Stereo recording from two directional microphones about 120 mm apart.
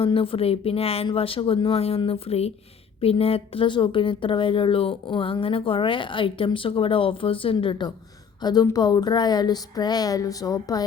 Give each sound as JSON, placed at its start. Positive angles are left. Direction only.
{"t": 0.0, "sound": "a woman's voice", "side_deg": 50}